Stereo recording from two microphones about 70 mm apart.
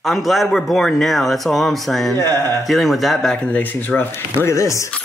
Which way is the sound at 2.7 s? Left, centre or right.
Centre.